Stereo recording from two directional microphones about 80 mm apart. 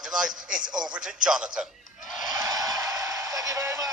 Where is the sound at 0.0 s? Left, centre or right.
Centre.